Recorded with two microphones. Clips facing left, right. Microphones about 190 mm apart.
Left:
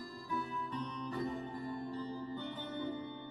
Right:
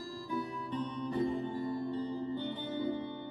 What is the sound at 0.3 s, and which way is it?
Music, 30° right (ahead or behind).